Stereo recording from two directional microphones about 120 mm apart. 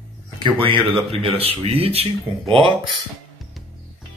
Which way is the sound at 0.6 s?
45° right (ahead or behind).